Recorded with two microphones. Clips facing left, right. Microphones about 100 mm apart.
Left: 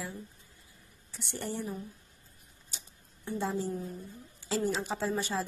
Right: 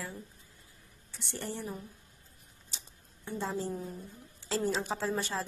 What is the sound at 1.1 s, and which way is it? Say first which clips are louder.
Speech: left 2 dB; 20° left (ahead or behind).